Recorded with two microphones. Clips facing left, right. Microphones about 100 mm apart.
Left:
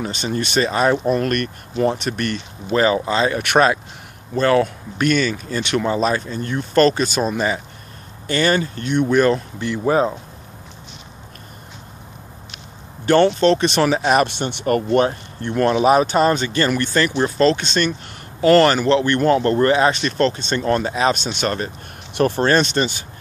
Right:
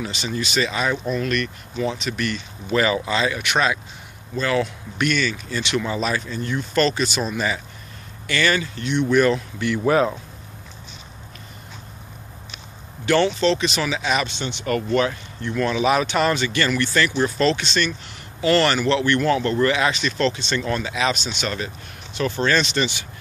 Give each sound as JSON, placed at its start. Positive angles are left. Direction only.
{"t": 0.0, "sound": "speech", "side_deg": 45}
{"t": 2.7, "sound": "speech", "side_deg": 35}
{"t": 13.0, "sound": "speech", "side_deg": 45}
{"t": 22.1, "sound": "speech", "side_deg": 55}